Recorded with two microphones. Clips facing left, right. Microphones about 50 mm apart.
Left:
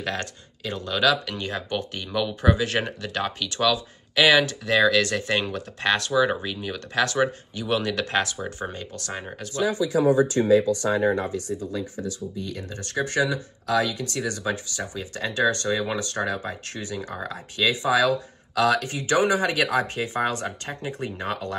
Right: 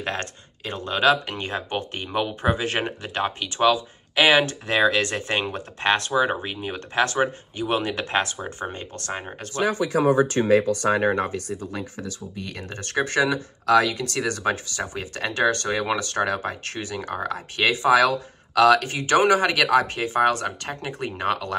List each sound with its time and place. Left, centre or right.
0.0 s speech: right
8.7 s speech: right
9.4 s speech: right